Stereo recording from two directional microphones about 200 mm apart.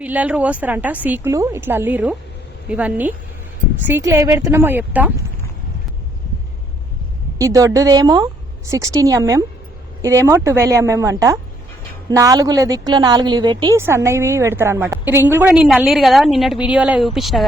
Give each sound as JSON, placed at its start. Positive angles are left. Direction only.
{"t": 0.0, "sound": "a woman's voice", "side_deg": -5}
{"t": 7.3, "sound": "a woman's voice", "side_deg": -15}